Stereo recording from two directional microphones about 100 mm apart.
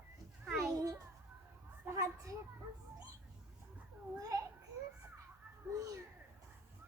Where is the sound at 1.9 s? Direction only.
30° right (ahead or behind).